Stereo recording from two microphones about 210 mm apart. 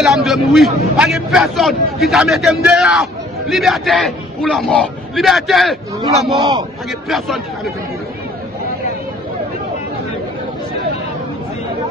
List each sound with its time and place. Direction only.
0.0 s a man's voice: centre (ahead or behind)